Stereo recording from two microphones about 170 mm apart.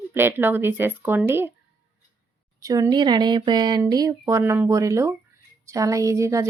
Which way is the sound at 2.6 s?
20° right (ahead or behind).